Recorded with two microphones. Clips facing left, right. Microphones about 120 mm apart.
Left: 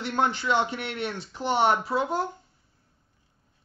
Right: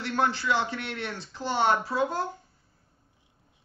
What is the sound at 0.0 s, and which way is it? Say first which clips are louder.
Speech: left 1 dB; 20° left (ahead or behind).